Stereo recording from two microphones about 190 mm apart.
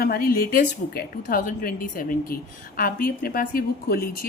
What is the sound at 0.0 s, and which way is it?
A woman's voice, 50° left (ahead or behind).